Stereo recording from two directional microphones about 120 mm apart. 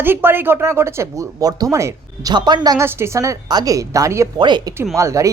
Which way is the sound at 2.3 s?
35° right (ahead or behind).